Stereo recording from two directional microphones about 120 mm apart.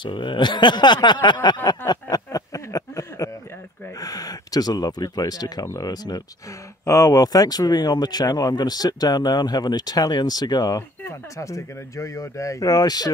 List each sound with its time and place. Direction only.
0.0 s speech: 40° left (ahead or behind)
1.9 s a sound: 30° left (ahead or behind)
4.0 s speech: 30° left (ahead or behind)